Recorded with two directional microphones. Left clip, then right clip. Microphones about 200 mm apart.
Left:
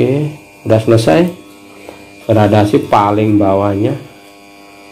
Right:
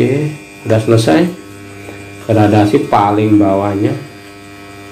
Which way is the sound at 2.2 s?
40° left (ahead or behind).